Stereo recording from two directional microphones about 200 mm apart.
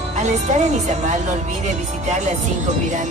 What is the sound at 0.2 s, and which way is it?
Speech, 35° right (ahead or behind).